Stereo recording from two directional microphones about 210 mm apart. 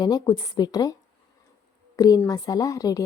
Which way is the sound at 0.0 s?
20° left (ahead or behind).